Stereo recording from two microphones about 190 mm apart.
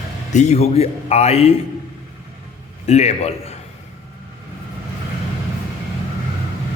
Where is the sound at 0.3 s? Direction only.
35° left (ahead or behind).